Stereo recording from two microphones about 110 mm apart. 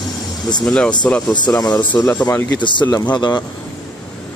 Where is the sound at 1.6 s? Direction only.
40° left (ahead or behind).